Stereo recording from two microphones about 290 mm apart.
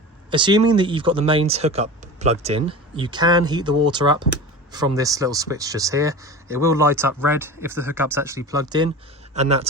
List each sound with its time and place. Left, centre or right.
0.3 s speech: centre